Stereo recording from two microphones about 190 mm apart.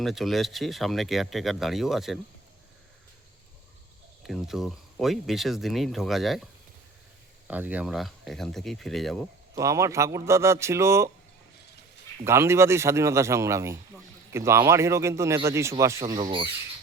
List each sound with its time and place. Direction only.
0.0 s speech: centre (ahead or behind)
4.2 s speech: centre (ahead or behind)
7.4 s speech: 10° right (ahead or behind)
9.6 s speech: 15° right (ahead or behind)
12.2 s speech: 15° right (ahead or behind)